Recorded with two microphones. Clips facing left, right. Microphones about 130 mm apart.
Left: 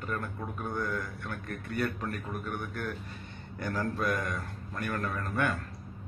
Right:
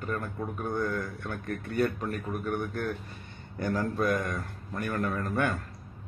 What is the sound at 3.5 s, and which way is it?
A man's voice, 30° right (ahead or behind).